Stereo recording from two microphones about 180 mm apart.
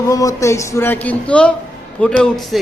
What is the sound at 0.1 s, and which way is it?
A man's voice, 20° left (ahead or behind).